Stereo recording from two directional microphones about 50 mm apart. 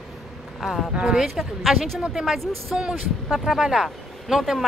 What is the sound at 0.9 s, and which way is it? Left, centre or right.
Speech, centre.